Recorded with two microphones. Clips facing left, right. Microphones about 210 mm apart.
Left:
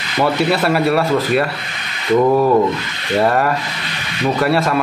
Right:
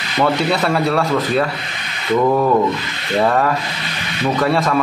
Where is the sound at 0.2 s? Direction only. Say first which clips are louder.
Left 1 dB; 5° left (ahead or behind).